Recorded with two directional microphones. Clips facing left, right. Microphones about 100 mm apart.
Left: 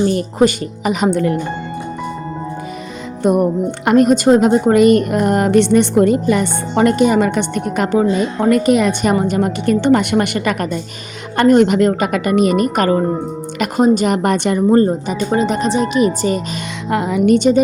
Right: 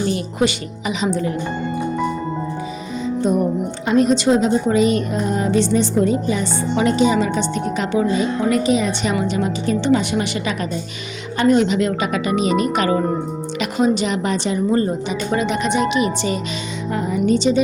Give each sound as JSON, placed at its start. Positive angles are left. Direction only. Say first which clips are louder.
{"t": 0.0, "sound": "speech", "louder": "left 6 dB", "side_deg": 40}
{"t": 3.2, "sound": "a woman's voice", "louder": "left 6 dB", "side_deg": 60}
{"t": 14.8, "sound": "speech", "louder": "left 6 dB", "side_deg": 45}
{"t": 16.9, "sound": "a woman's voice", "louder": "left 5 dB", "side_deg": 85}